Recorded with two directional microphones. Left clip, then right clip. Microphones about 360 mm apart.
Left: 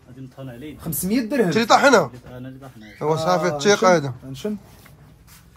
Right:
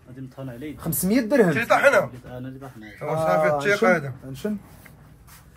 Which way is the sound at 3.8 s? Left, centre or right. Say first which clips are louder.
Left 4 dB; left.